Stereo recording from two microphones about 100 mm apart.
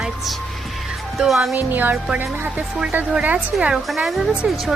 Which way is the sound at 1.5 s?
20° right (ahead or behind).